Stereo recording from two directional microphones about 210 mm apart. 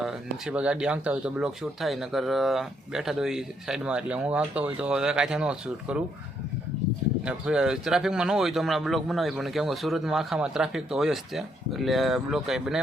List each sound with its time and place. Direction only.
0.0 s speech: 5° right (ahead or behind)
7.3 s speech: 5° right (ahead or behind)